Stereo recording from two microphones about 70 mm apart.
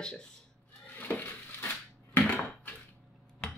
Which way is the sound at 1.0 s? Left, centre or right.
Left.